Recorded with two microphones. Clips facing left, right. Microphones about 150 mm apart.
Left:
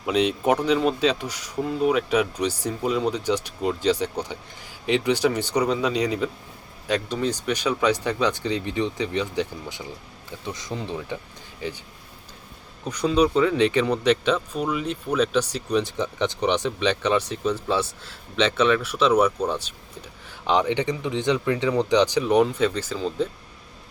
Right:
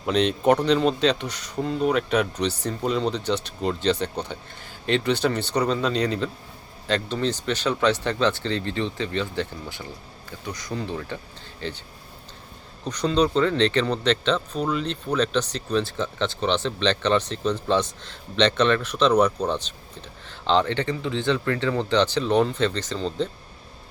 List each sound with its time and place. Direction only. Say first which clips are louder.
0.0 s speech: right 1 dB; 5° left (ahead or behind)
12.8 s speech: left 1 dB; 10° left (ahead or behind)